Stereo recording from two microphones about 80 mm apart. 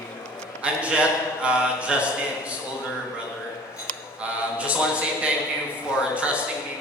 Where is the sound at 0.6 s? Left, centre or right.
Centre.